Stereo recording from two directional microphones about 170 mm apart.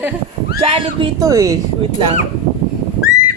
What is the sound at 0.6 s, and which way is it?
Speech, 40° right (ahead or behind).